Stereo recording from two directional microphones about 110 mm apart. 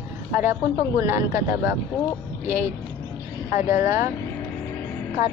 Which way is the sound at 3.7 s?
25° right (ahead or behind).